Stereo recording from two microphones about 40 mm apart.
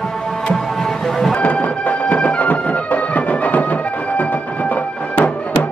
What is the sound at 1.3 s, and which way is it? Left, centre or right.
Music, left.